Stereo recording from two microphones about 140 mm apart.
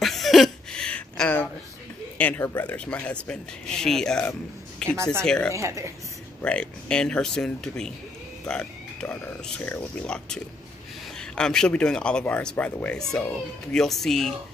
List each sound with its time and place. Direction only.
0.0 s a sound: centre (ahead or behind)
2.1 s speech: 15° left (ahead or behind)
4.8 s a sound: 5° left (ahead or behind)
5.2 s speech: 5° left (ahead or behind)
5.5 s speech: 20° right (ahead or behind)
6.4 s speech: 10° left (ahead or behind)